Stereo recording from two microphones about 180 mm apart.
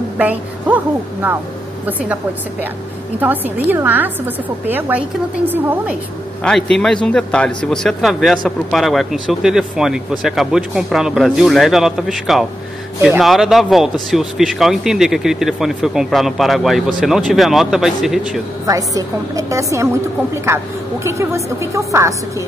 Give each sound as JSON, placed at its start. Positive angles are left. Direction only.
{"t": 0.2, "sound": "a woman's voice", "side_deg": -10}
{"t": 1.9, "sound": "speech", "side_deg": -10}
{"t": 3.2, "sound": "speech", "side_deg": -10}
{"t": 6.4, "sound": "speech", "side_deg": 5}
{"t": 18.7, "sound": "speech", "side_deg": -20}